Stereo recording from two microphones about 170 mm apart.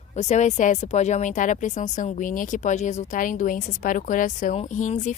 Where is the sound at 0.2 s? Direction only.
45° left (ahead or behind).